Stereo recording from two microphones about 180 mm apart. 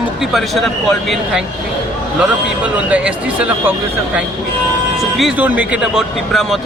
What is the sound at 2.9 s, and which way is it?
Speech, 5° right (ahead or behind).